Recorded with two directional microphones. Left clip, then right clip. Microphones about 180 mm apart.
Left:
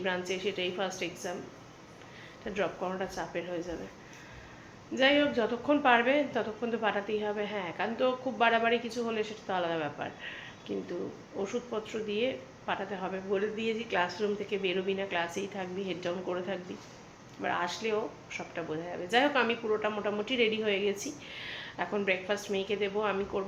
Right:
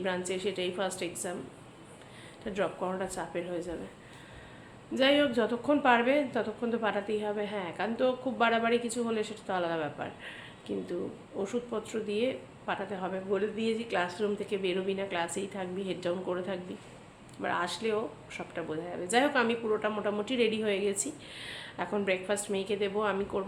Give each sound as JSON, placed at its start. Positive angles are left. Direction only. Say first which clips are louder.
{"t": 0.0, "sound": "a woman's voice", "louder": "even", "side_deg": -15}
{"t": 2.4, "sound": "a woman's voice", "louder": "right 1 dB", "side_deg": -15}
{"t": 4.9, "sound": "a woman's voice", "louder": "even", "side_deg": -20}
{"t": 11.3, "sound": "a woman's voice", "louder": "even", "side_deg": -15}